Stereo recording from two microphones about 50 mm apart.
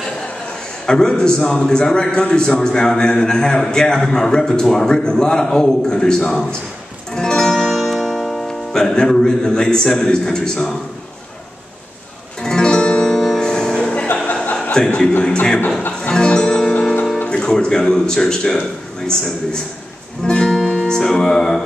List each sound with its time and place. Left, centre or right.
0.8 s a man's voice: centre
7.1 s music: centre
7.6 s speech: centre
12.4 s music: centre
14.3 s chuckle: left
14.9 s a man's voice: centre
16.0 s music: centre
17.3 s a man's voice: centre
20.2 s music: centre